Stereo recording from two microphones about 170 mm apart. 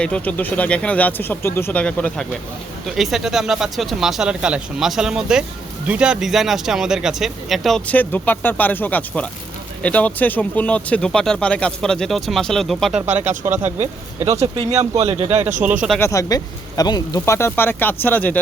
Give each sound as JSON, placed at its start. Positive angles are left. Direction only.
{"t": 0.0, "sound": "speech", "side_deg": 5}
{"t": 13.4, "sound": "speech", "side_deg": -20}
{"t": 14.5, "sound": "speech", "side_deg": -35}
{"t": 16.0, "sound": "speech", "side_deg": 15}